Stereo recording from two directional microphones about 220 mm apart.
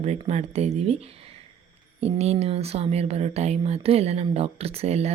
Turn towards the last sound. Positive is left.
turn(degrees=-30)  # may be behind; listen again after turning